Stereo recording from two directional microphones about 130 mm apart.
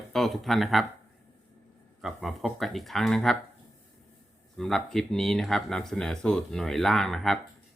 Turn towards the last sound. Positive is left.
turn(degrees=0)  # may be behind; listen again after turning